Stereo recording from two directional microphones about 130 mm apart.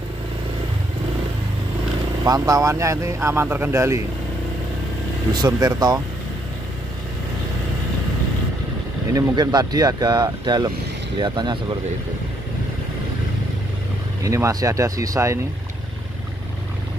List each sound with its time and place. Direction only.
2.2 s speech: 30° right (ahead or behind)
5.3 s speech: 30° right (ahead or behind)
9.1 s speech: 30° right (ahead or behind)
14.2 s speech: 25° right (ahead or behind)